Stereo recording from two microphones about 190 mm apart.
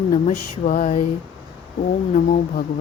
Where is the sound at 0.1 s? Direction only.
40° left (ahead or behind).